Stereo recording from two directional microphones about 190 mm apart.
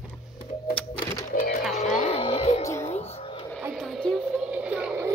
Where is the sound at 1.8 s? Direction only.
35° left (ahead or behind).